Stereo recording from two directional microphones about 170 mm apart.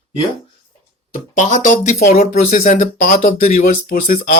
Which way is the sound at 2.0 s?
60° left (ahead or behind).